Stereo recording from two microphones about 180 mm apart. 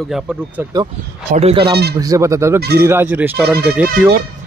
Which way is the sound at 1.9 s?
20° right (ahead or behind).